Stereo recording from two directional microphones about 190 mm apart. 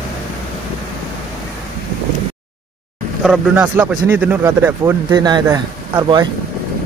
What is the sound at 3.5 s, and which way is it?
Speech, 10° right (ahead or behind).